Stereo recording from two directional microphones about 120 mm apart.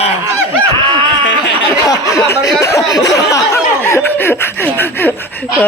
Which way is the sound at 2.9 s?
30° left (ahead or behind).